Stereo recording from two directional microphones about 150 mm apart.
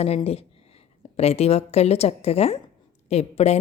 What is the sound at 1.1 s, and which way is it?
A woman's voice, 45° left (ahead or behind).